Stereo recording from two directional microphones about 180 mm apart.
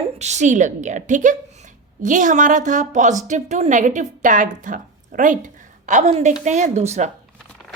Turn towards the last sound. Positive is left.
turn(degrees=-40)  # may be behind; listen again after turning